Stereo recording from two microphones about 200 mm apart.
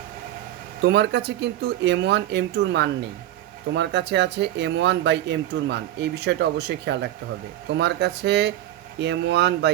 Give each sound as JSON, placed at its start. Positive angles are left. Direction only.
{"t": 0.8, "sound": "speech", "side_deg": -60}